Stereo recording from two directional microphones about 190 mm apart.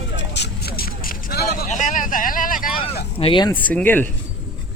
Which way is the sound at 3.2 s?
25° left (ahead or behind).